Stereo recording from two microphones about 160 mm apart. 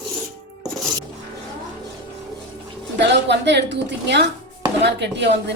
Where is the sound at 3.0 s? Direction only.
90° right.